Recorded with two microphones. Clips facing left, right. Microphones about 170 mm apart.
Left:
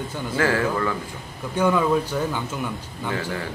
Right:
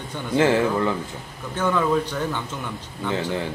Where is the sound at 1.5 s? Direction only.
10° left (ahead or behind).